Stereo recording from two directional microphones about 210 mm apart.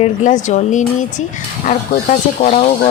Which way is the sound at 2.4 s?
35° left (ahead or behind).